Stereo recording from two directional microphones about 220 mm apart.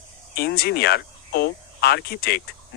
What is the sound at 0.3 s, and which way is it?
Speech, 45° left (ahead or behind).